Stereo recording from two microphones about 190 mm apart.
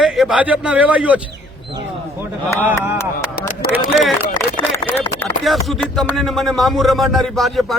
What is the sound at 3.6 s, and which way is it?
Speech, 50° left (ahead or behind).